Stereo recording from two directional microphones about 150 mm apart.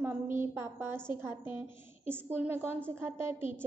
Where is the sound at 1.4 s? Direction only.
30° left (ahead or behind).